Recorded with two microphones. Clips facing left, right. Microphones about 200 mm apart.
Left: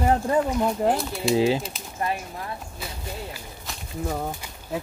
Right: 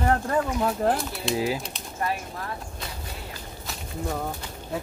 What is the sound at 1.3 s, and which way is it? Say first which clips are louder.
Speech: left 6 dB; 25° left (ahead or behind).